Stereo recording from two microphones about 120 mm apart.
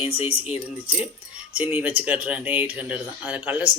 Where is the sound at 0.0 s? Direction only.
55° left (ahead or behind).